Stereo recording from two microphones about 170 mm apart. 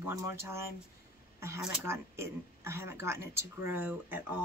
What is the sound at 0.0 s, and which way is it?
Speech, 15° right (ahead or behind).